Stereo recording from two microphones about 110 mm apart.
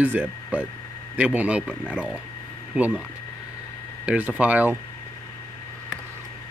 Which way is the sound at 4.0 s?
10° right (ahead or behind).